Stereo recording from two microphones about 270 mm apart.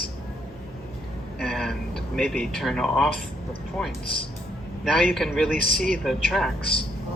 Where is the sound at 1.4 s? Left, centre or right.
Centre.